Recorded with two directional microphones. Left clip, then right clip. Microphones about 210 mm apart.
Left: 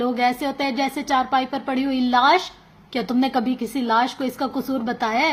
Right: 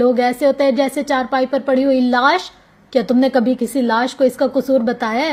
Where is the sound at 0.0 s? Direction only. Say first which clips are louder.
Right 7 dB; 20° right (ahead or behind).